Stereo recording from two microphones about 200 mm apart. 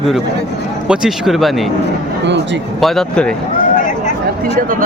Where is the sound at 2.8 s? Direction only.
5° left (ahead or behind).